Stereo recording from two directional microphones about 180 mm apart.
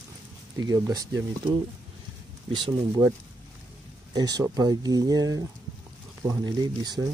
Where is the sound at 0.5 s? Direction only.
20° right (ahead or behind).